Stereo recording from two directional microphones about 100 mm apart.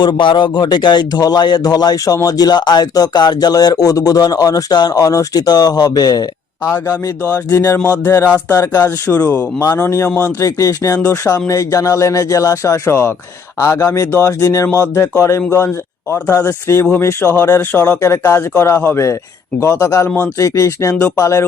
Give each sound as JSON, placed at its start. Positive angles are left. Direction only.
{"t": 0.0, "sound": "a man's voice", "side_deg": 50}
{"t": 7.5, "sound": "a man's voice", "side_deg": 30}
{"t": 8.8, "sound": "speech", "side_deg": 15}
{"t": 10.4, "sound": "a man's voice", "side_deg": 35}
{"t": 16.1, "sound": "a man's voice", "side_deg": 15}